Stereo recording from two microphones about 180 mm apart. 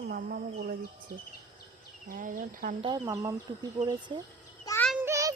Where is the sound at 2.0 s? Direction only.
50° right (ahead or behind).